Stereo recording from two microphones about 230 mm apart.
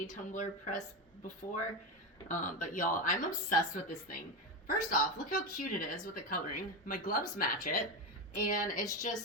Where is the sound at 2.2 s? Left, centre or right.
Left.